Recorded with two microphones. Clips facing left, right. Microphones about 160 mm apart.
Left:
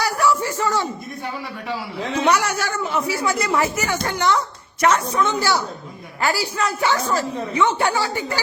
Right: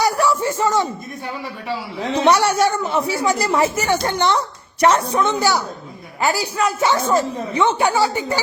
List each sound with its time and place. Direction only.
0.2 s a sound: 25° right (ahead or behind)
2.1 s a man's voice: 30° right (ahead or behind)
5.2 s a woman's voice: 15° right (ahead or behind)